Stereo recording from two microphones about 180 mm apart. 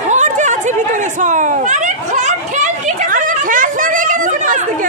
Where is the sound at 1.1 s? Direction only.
45° right (ahead or behind).